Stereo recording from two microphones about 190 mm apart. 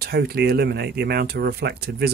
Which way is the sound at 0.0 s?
55° right (ahead or behind).